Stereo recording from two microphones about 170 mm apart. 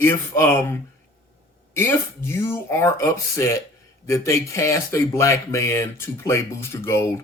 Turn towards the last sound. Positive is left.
turn(degrees=15)  # may be behind; listen again after turning